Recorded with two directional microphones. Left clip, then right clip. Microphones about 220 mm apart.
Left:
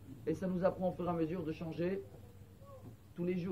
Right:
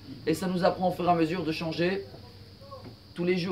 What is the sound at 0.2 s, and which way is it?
Speech, 25° right (ahead or behind).